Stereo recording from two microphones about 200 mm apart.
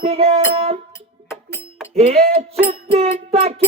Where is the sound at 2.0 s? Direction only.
30° right (ahead or behind).